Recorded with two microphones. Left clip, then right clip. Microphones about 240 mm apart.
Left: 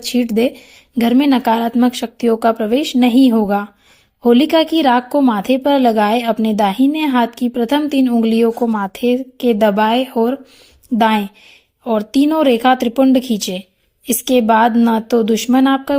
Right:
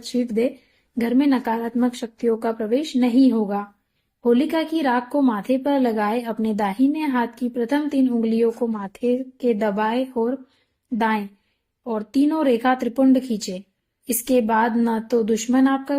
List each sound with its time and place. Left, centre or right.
0.1 s a woman's voice: left